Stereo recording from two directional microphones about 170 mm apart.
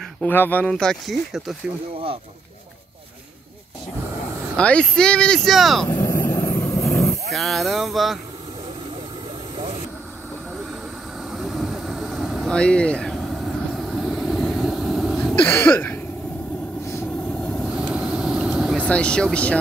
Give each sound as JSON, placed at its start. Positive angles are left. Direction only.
{"t": 0.2, "sound": "speech", "side_deg": 10}
{"t": 4.6, "sound": "speech", "side_deg": 5}
{"t": 5.9, "sound": "vehicle", "side_deg": 20}
{"t": 7.2, "sound": "speech", "side_deg": 0}
{"t": 11.3, "sound": "vehicle", "side_deg": 0}
{"t": 15.4, "sound": "speech", "side_deg": 10}
{"t": 16.9, "sound": "vehicle", "side_deg": 5}
{"t": 18.8, "sound": "speech", "side_deg": 5}